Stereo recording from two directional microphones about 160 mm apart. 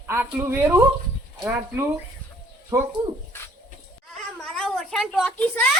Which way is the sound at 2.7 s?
20° right (ahead or behind).